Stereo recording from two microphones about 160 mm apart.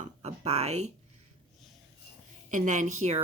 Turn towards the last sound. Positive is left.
turn(degrees=-45)  # may be behind; listen again after turning